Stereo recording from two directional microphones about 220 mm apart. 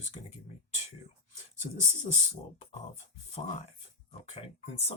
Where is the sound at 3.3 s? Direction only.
30° left (ahead or behind).